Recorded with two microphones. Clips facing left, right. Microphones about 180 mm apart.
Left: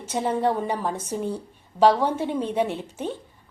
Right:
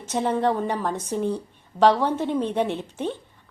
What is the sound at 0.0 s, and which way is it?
A woman's voice, 10° left (ahead or behind).